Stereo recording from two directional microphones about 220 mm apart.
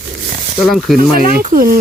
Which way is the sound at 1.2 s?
40° right (ahead or behind).